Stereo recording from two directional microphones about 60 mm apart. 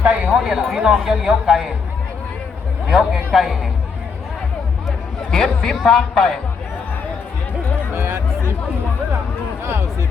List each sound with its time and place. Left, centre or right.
0.0 s a sound: right
0.3 s speech: centre
2.9 s speech: centre
5.3 s speech: centre
7.9 s music: right